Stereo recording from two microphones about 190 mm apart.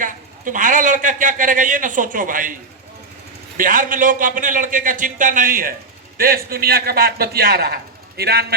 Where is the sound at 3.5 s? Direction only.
45° right (ahead or behind).